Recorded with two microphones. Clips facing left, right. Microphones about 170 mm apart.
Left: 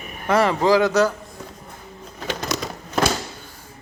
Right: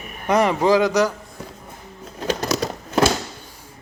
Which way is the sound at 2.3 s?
35° right (ahead or behind).